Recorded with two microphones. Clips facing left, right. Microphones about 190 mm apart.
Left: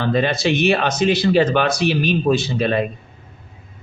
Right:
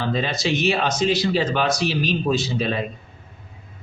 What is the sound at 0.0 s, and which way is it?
Speech, 60° left (ahead or behind).